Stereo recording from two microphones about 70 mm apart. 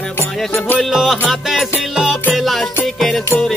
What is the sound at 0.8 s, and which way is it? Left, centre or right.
Music, centre.